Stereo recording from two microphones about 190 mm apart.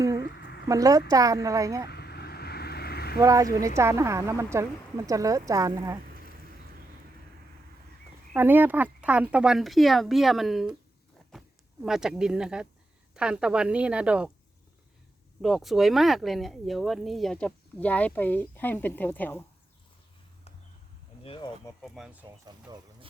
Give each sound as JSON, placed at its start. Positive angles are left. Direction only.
{"t": 0.0, "sound": "a sound", "side_deg": -15}
{"t": 0.3, "sound": "a sound", "side_deg": 60}
{"t": 0.7, "sound": "speech", "side_deg": -20}
{"t": 1.9, "sound": "boat", "side_deg": 60}
{"t": 3.2, "sound": "speech", "side_deg": -15}
{"t": 8.3, "sound": "speech", "side_deg": -10}
{"t": 15.4, "sound": "speech", "side_deg": 0}
{"t": 21.2, "sound": "a sound", "side_deg": 25}
{"t": 21.8, "sound": "speech", "side_deg": 0}
{"t": 22.4, "sound": "speech", "side_deg": -20}